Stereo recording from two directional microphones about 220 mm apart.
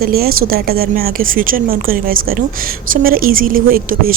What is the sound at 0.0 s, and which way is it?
A woman's voice, 45° right (ahead or behind).